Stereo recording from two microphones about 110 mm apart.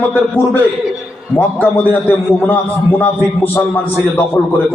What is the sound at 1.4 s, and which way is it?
A man's voice, 20° left (ahead or behind).